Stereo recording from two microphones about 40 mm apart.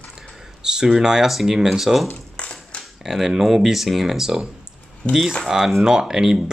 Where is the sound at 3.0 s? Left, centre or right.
Centre.